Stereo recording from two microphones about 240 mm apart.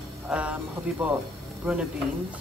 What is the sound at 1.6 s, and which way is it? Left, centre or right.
Speech, centre.